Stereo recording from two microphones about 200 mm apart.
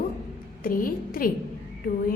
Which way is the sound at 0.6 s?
45° left (ahead or behind).